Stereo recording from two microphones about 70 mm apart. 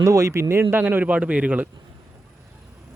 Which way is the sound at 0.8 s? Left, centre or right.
Right.